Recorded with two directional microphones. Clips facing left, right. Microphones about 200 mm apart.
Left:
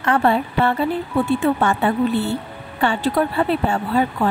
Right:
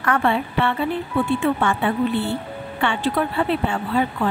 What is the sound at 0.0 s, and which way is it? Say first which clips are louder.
Speech: left 3 dB; 35° left (ahead or behind).